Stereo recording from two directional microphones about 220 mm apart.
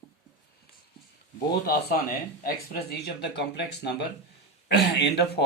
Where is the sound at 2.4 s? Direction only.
45° left (ahead or behind).